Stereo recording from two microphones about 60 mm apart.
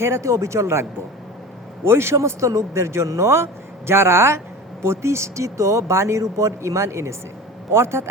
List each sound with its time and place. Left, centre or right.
0.0 s speech: right
2.2 s speech: right